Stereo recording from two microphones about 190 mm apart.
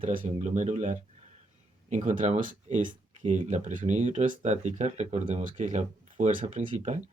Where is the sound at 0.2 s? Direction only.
35° right (ahead or behind).